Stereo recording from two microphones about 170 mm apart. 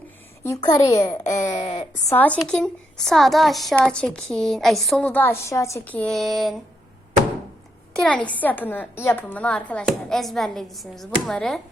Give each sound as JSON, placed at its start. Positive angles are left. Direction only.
{"t": 0.4, "sound": "a child's voice", "side_deg": 20}
{"t": 2.0, "sound": "a woman's voice", "side_deg": 10}
{"t": 7.9, "sound": "a woman's voice", "side_deg": 5}